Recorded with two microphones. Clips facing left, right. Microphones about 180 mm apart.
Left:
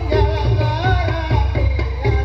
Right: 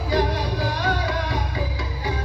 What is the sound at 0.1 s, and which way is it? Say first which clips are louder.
Music: left 4 dB; 65° left (ahead or behind).